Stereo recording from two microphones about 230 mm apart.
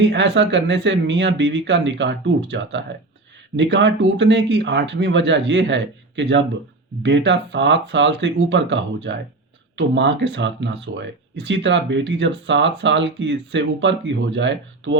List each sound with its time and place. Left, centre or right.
0.0 s speech: right